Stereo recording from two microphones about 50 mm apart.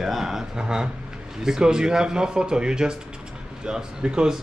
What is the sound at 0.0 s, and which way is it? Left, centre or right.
A man's voice, centre.